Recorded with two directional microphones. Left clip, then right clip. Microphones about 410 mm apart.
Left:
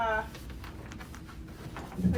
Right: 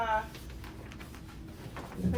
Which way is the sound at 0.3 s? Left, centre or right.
Centre.